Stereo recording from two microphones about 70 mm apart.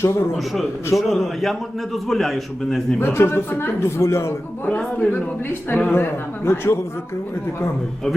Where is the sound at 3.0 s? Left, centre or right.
Left.